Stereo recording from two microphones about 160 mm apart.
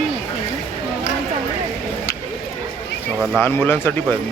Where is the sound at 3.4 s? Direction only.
15° left (ahead or behind).